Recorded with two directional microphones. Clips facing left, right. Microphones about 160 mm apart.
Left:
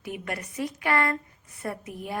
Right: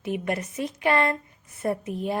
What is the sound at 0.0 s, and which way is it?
A woman's voice, 25° right (ahead or behind).